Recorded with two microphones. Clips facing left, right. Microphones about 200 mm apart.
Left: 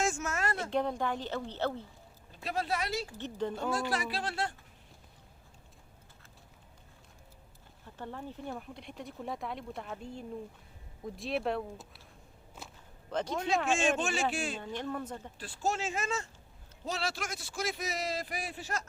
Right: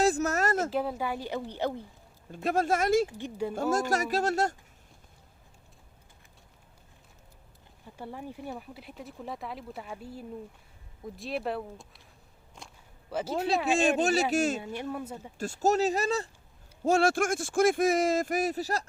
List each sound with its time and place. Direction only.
0.0 s a sound: 35° right (ahead or behind)
0.7 s speech: 5° right (ahead or behind)
2.3 s speech: 50° right (ahead or behind)
3.1 s speech: 10° right (ahead or behind)
3.7 s speech: 45° right (ahead or behind)
7.9 s speech: 10° right (ahead or behind)
12.6 s whip: 5° left (ahead or behind)
13.1 s speech: 5° right (ahead or behind)
13.7 s speech: 35° right (ahead or behind)
14.6 s speech: 10° right (ahead or behind)
15.4 s speech: 45° right (ahead or behind)
16.8 s speech: 50° right (ahead or behind)